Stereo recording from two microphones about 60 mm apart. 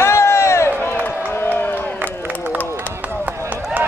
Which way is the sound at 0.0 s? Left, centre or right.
Left.